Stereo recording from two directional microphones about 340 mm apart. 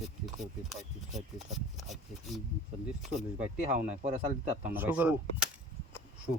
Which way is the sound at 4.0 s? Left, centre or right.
Right.